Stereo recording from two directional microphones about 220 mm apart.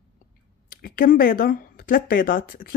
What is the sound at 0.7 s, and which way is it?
Speech, 40° left (ahead or behind).